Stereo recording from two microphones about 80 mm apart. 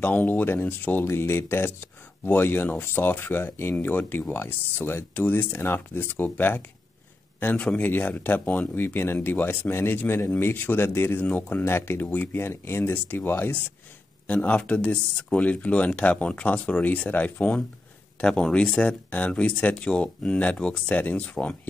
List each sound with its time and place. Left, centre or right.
0.0 s speech: left